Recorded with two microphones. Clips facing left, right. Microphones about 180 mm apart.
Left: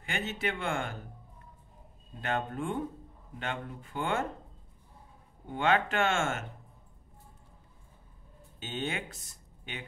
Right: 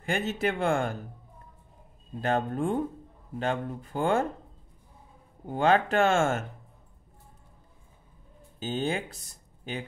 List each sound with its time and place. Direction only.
0.0 s speech: 40° right (ahead or behind)
2.2 s speech: 35° right (ahead or behind)
5.5 s speech: 40° right (ahead or behind)
8.5 s speech: 35° right (ahead or behind)